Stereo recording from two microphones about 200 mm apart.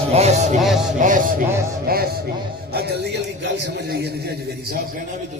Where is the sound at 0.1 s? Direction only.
35° right (ahead or behind).